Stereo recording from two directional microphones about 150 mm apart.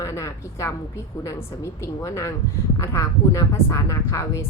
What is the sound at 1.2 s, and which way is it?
Speech, 20° left (ahead or behind).